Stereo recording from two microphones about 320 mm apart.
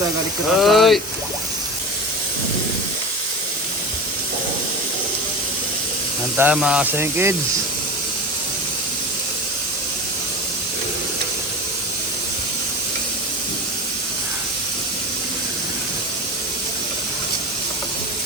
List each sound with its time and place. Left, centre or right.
0.6 s speech: centre
6.3 s speech: centre